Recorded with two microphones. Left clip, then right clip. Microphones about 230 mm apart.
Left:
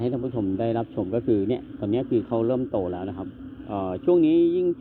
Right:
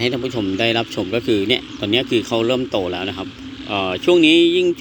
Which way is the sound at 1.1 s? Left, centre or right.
Centre.